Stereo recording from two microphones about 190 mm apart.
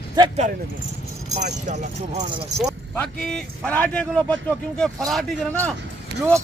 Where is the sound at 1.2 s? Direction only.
35° right (ahead or behind).